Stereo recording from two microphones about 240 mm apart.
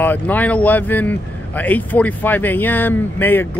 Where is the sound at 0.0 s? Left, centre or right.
Centre.